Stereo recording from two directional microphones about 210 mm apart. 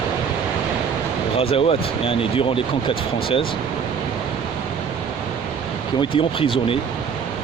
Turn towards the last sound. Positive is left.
turn(degrees=25)  # may be behind; listen again after turning